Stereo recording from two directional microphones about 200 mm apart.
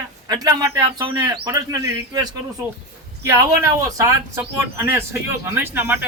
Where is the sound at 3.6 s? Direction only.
15° right (ahead or behind).